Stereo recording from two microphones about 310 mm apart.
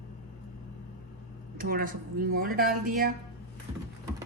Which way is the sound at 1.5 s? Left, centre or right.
Right.